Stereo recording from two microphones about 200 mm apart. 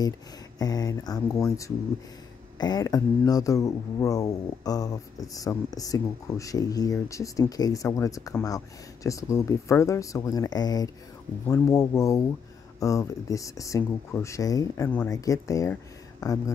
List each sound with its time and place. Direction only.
0.6 s speech: 20° left (ahead or behind)